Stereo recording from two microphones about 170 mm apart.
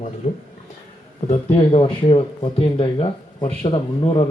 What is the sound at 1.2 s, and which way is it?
Speech, 35° left (ahead or behind).